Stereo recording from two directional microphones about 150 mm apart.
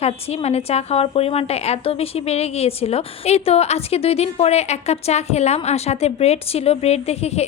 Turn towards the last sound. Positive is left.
turn(degrees=45)  # may be behind; listen again after turning